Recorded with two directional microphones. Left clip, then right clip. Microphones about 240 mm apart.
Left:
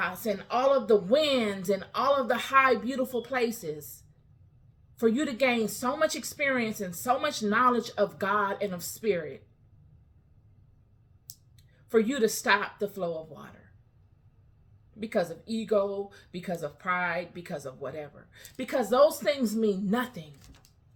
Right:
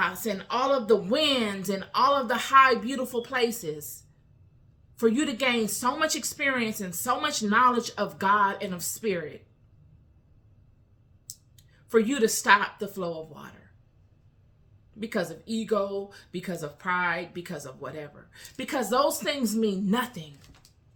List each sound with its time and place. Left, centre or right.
0.0 s speech: centre
4.9 s speech: centre
11.5 s a woman's voice: centre
14.9 s speech: centre
20.4 s typing: left